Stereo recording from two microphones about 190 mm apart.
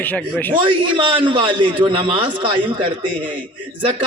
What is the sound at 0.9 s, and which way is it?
A man's voice, 25° right (ahead or behind).